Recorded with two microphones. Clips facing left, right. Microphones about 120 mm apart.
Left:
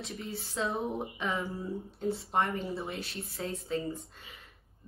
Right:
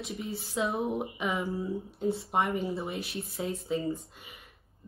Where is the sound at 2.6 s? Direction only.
Centre (ahead or behind).